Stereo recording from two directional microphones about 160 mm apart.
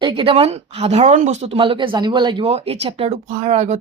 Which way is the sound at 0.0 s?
30° right (ahead or behind).